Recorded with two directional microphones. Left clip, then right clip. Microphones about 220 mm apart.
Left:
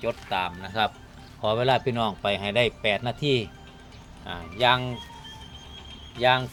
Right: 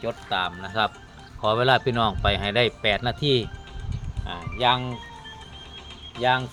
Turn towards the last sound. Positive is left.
turn(degrees=5)  # may be behind; listen again after turning